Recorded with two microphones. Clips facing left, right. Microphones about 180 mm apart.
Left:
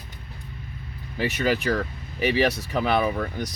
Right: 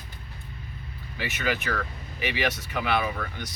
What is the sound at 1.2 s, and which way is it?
Speech, 35° left (ahead or behind).